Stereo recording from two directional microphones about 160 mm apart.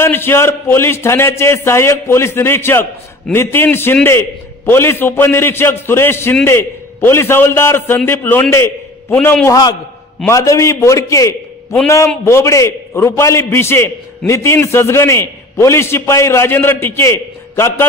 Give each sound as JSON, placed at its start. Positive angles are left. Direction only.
{"t": 0.0, "sound": "a man's voice", "side_deg": 15}